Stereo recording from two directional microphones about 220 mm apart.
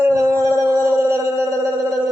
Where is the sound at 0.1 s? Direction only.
15° right (ahead or behind).